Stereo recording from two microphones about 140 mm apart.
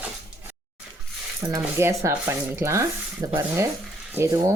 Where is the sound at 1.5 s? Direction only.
20° right (ahead or behind).